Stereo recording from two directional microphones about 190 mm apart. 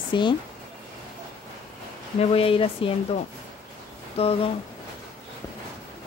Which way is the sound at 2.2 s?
30° left (ahead or behind).